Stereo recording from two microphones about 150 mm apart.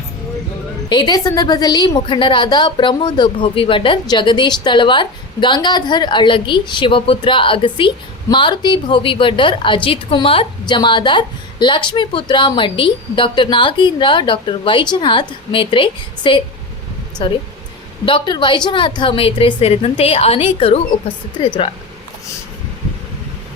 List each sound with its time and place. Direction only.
0.9 s a woman's voice: 30° left (ahead or behind)